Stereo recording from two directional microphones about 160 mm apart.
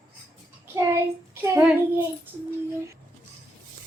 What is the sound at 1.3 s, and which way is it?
Child singing, 15° right (ahead or behind).